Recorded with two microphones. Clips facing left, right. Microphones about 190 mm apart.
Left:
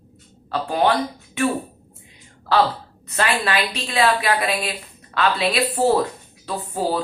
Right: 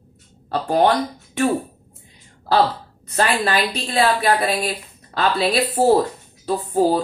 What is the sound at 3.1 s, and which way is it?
Speech, 40° right (ahead or behind).